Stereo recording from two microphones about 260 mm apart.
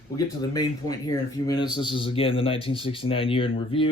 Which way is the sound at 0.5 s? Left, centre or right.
Centre.